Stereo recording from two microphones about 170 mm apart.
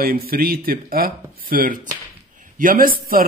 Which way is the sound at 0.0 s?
60° right (ahead or behind).